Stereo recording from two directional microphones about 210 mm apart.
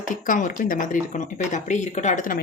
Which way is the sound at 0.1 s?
40° left (ahead or behind).